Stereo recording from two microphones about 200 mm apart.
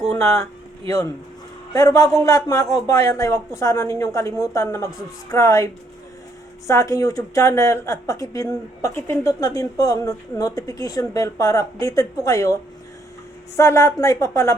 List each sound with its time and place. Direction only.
0.2 s speech: 15° left (ahead or behind)
1.7 s speech: 15° left (ahead or behind)
6.7 s speech: 15° left (ahead or behind)
13.6 s speech: 15° left (ahead or behind)